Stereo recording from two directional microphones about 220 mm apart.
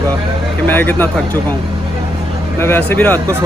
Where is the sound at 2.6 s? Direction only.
10° left (ahead or behind).